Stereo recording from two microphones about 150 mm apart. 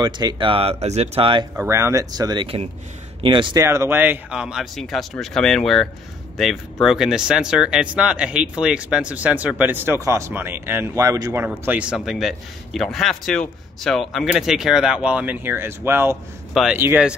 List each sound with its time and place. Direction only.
0.0 s speech: 30° right (ahead or behind)
1.6 s speech: 15° right (ahead or behind)
2.4 s speech: 40° right (ahead or behind)
3.6 s a man's voice: 20° right (ahead or behind)
11.4 s a man's voice: 10° right (ahead or behind)